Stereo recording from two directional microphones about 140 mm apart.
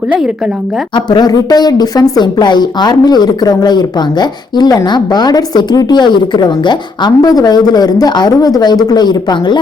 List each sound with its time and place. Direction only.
0.1 s a woman's voice: 5° right (ahead or behind)
0.9 s speech: 30° left (ahead or behind)